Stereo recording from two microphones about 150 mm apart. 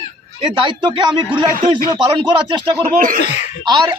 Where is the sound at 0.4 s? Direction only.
30° right (ahead or behind).